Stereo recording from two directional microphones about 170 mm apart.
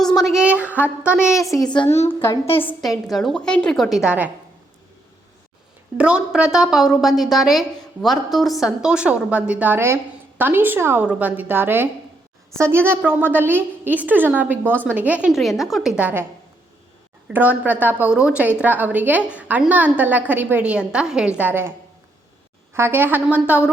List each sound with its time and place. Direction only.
0.2 s a sound: centre (ahead or behind)
1.1 s a woman's voice: 5° right (ahead or behind)
1.4 s a woman's voice: 20° left (ahead or behind)
3.1 s a woman's voice: centre (ahead or behind)
6.0 s a woman's voice: 5° right (ahead or behind)
17.2 s a woman's voice: 10° right (ahead or behind)
22.7 s a woman's voice: 15° right (ahead or behind)